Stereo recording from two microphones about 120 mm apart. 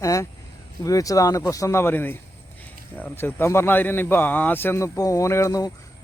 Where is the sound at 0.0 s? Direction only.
25° left (ahead or behind).